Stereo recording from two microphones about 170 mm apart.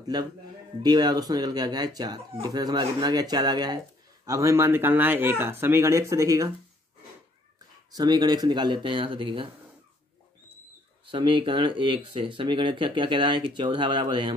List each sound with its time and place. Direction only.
0.0 s a man's voice: 25° right (ahead or behind)
7.9 s speech: 25° right (ahead or behind)
11.1 s speech: 30° right (ahead or behind)